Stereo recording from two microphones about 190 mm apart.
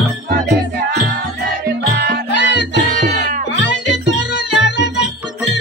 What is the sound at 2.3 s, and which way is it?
Music, 65° left (ahead or behind).